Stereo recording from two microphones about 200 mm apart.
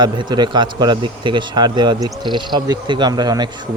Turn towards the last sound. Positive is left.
turn(degrees=-20)  # may be behind; listen again after turning